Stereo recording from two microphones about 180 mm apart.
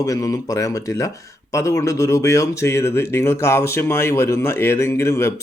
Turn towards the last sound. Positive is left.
turn(degrees=15)  # may be behind; listen again after turning